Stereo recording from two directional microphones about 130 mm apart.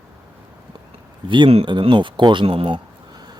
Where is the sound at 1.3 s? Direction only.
45° right (ahead or behind).